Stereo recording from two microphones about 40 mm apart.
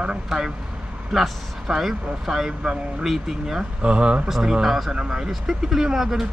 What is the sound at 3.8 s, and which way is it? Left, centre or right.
Speech, right.